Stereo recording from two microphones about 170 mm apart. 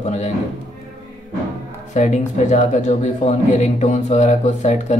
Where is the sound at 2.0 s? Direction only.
45° left (ahead or behind).